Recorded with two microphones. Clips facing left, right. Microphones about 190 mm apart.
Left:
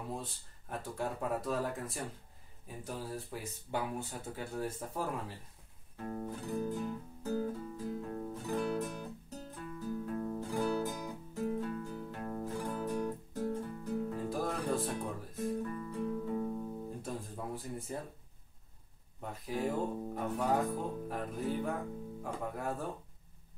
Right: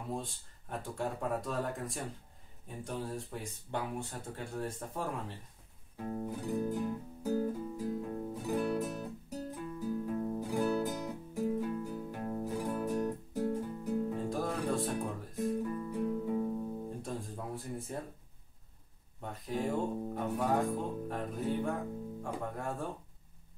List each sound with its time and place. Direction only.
0.1 s speech: centre (ahead or behind)
5.9 s music: 10° right (ahead or behind)
9.3 s guitar: 10° right (ahead or behind)
11.3 s music: 10° right (ahead or behind)
15.6 s guitar: 10° right (ahead or behind)
19.2 s speech: centre (ahead or behind)